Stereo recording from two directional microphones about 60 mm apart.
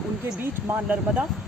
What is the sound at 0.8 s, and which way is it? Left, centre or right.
Speech, centre.